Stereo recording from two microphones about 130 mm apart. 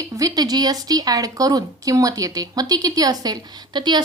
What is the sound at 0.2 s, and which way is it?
A woman's voice, 30° right (ahead or behind).